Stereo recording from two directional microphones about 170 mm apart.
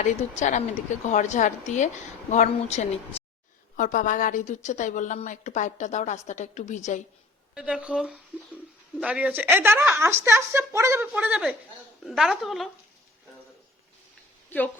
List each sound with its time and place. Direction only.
0.0 s a woman's voice: 45° left (ahead or behind)
3.8 s a woman's voice: 50° left (ahead or behind)
7.5 s speech: 5° right (ahead or behind)